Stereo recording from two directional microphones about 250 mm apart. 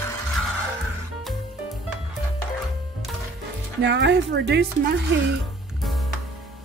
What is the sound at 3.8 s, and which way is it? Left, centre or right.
A woman's voice, right.